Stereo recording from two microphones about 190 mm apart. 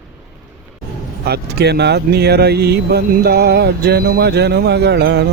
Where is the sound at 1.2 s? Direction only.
60° right (ahead or behind).